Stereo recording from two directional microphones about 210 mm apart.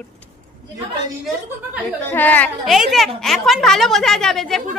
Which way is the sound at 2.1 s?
10° left (ahead or behind).